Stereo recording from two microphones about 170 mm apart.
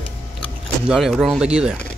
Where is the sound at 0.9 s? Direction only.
Centre (ahead or behind).